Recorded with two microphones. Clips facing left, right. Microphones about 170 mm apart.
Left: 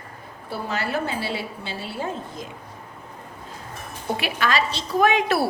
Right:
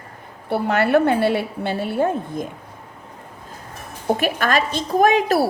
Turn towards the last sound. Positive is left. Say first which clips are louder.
# right 4 dB
turn(degrees=-40)  # may be behind; listen again after turning